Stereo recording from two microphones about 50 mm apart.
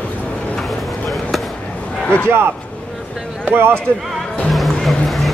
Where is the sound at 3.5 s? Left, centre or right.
Right.